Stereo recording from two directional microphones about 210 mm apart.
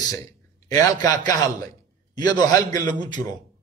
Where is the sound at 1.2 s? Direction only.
20° left (ahead or behind).